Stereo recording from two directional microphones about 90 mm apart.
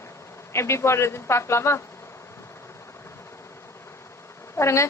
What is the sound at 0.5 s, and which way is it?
Speech, 30° left (ahead or behind).